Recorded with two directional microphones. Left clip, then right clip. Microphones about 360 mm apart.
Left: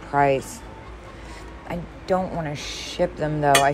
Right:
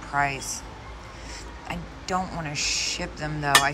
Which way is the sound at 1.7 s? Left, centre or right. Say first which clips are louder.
Left 5 dB; centre.